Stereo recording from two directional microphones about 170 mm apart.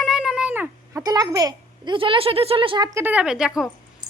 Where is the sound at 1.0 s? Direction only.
25° right (ahead or behind).